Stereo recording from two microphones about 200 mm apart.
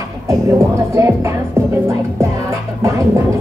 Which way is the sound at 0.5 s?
15° right (ahead or behind).